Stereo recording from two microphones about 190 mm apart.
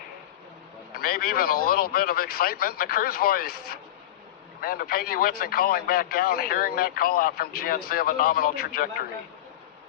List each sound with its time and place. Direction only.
0.9 s speech: 50° left (ahead or behind)